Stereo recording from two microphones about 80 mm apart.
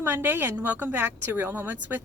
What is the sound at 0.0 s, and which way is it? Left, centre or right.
Speech, right.